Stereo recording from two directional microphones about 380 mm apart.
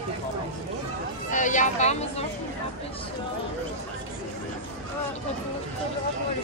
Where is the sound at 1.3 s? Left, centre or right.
Centre.